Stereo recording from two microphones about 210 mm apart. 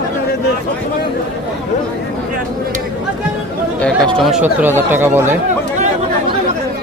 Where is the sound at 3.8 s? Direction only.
5° left (ahead or behind).